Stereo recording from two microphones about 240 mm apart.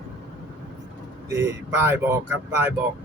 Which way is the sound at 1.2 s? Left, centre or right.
Centre.